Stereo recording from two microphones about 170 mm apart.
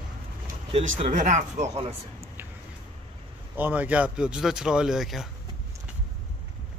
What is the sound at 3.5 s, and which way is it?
Speech, 10° right (ahead or behind).